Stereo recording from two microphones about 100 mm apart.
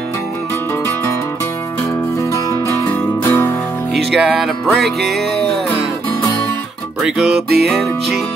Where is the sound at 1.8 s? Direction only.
35° left (ahead or behind).